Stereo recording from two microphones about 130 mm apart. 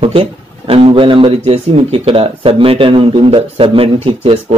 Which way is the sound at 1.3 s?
50° right (ahead or behind).